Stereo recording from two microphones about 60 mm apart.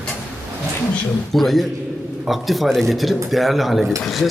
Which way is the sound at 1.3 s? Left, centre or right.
Centre.